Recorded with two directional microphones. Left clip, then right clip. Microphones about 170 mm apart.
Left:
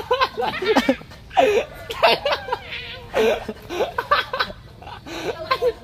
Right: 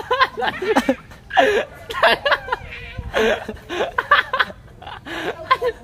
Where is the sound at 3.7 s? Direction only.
30° right (ahead or behind).